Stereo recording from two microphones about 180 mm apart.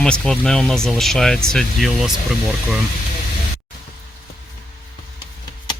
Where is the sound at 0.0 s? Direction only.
5° left (ahead or behind).